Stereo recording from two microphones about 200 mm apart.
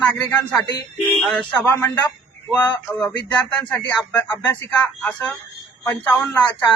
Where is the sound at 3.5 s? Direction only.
5° left (ahead or behind).